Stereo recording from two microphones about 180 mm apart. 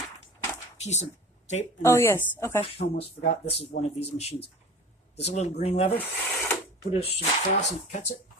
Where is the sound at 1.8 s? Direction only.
15° left (ahead or behind).